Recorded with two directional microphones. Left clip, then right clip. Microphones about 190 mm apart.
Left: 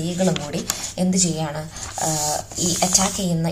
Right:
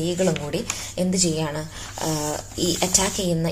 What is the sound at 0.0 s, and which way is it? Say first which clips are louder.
A woman's voice: even; 40° right (ahead or behind).